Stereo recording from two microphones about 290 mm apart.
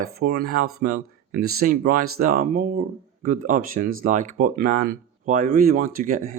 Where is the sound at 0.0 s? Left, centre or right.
Right.